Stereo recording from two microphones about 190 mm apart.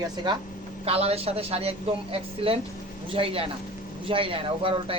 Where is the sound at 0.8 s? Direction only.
30° right (ahead or behind).